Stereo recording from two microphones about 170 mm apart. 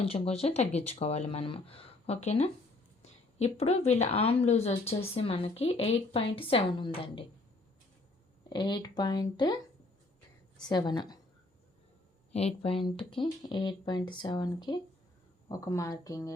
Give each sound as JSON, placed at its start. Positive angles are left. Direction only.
{"t": 0.0, "sound": "speech", "side_deg": 35}
{"t": 8.4, "sound": "speech", "side_deg": 25}
{"t": 10.6, "sound": "speech", "side_deg": 25}
{"t": 12.3, "sound": "speech", "side_deg": 35}